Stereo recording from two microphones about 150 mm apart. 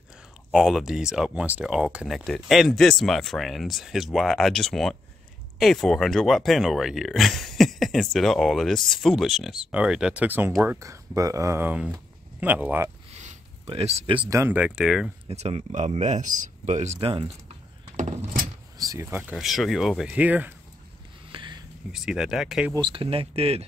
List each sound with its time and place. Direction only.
0.5 s speech: centre (ahead or behind)
13.1 s a sound: 50° right (ahead or behind)
13.7 s speech: 45° right (ahead or behind)
14.3 s speech: 15° right (ahead or behind)
15.2 s speech: 45° right (ahead or behind)
17.9 s door: 55° right (ahead or behind)
18.8 s speech: 20° right (ahead or behind)
19.3 s speech: centre (ahead or behind)
21.3 s a sound: 30° right (ahead or behind)
21.9 s speech: 5° right (ahead or behind)
22.8 s speech: 35° right (ahead or behind)